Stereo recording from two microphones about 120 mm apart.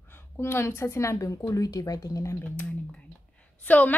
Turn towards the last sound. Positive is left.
turn(degrees=15)  # may be behind; listen again after turning